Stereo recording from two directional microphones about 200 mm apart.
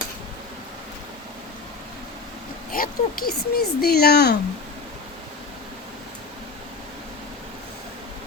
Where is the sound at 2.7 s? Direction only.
45° left (ahead or behind).